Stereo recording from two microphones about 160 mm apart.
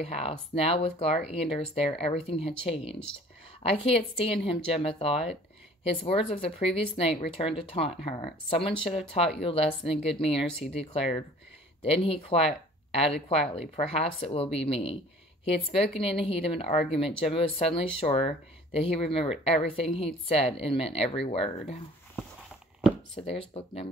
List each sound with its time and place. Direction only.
0.0 s speech: 40° left (ahead or behind)
23.1 s speech: 40° left (ahead or behind)